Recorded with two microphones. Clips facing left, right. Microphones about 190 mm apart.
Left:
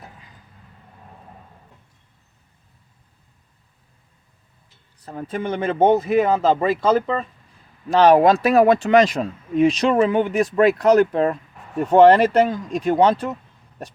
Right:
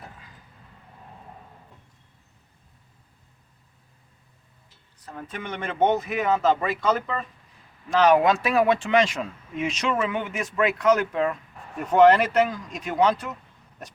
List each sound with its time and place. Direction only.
5.0 s speech: 35° left (ahead or behind)